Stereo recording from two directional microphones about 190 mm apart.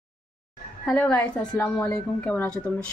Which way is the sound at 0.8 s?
5° left (ahead or behind).